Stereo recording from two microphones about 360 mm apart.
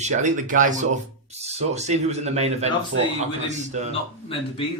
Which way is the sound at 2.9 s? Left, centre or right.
Right.